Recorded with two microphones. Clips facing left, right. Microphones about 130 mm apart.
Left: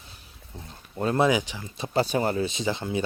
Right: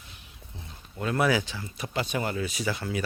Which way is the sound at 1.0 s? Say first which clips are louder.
Left 4 dB; 30° left (ahead or behind).